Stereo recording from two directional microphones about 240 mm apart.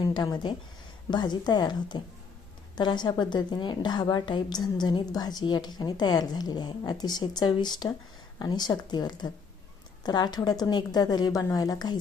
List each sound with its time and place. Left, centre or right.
0.0 s a woman's voice: centre